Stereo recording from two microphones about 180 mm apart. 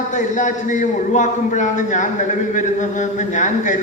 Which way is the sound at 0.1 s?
45° left (ahead or behind).